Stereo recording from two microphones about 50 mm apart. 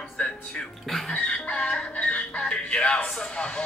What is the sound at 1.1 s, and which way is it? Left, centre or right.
Speech, left.